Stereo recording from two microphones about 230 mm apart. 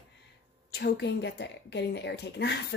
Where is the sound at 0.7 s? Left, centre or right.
Left.